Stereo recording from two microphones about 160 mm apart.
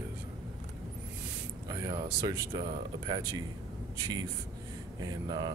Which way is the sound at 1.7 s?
20° right (ahead or behind).